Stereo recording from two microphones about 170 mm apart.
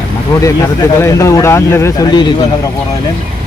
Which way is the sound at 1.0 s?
15° left (ahead or behind).